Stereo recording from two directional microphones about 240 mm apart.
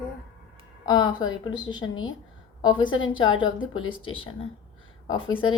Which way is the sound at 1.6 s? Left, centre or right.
Left.